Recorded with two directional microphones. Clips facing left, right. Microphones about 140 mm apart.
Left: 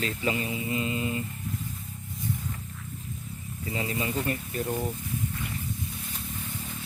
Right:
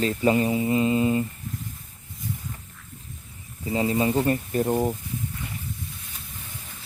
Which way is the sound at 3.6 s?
30° right (ahead or behind).